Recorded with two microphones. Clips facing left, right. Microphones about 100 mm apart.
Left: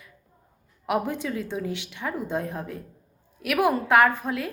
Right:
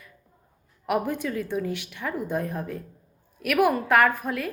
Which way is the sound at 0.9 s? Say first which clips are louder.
Even; 20° left (ahead or behind).